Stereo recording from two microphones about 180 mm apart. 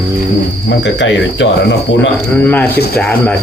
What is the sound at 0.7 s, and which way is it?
Speech, 75° left (ahead or behind).